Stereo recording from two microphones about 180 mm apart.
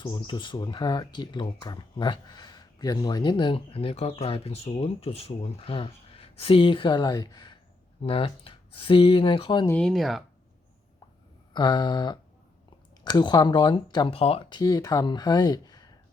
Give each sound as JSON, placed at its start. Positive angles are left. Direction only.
{"t": 0.0, "sound": "speech", "side_deg": 25}
{"t": 9.6, "sound": "speech", "side_deg": 5}
{"t": 11.5, "sound": "speech", "side_deg": 25}